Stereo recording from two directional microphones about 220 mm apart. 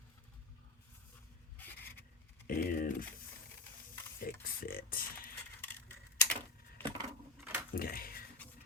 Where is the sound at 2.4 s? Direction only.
40° left (ahead or behind).